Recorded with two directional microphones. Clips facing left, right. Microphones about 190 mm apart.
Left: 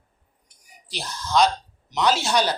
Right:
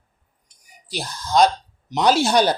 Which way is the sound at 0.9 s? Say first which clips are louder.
Right 2 dB; 45° right (ahead or behind).